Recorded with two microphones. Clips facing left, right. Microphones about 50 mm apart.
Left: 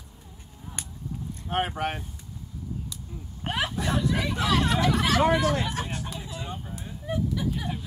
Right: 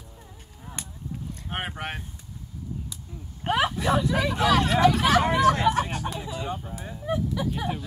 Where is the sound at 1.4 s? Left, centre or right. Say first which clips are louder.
Left 5 dB; centre.